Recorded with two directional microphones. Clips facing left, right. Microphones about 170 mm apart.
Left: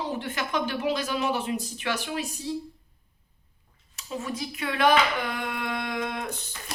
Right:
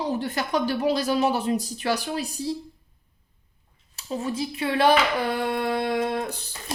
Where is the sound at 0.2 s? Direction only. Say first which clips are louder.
Right 4 dB; 35° right (ahead or behind).